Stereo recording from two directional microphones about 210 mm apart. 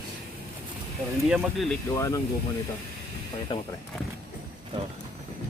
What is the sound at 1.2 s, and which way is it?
Speech, centre (ahead or behind).